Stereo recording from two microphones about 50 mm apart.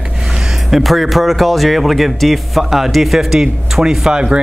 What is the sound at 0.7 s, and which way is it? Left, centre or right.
A man's voice, centre.